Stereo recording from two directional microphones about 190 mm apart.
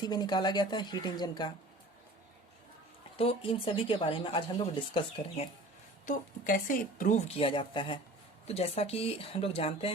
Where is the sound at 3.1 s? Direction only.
30° left (ahead or behind).